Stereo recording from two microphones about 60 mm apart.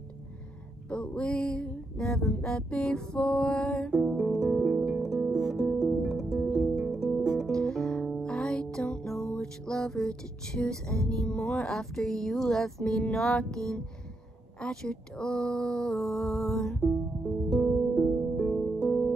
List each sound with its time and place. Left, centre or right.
0.8 s music: centre
3.9 s music: centre
7.5 s music: centre
14.6 s speech: centre
17.5 s music: centre